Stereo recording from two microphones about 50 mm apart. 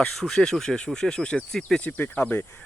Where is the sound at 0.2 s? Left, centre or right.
Centre.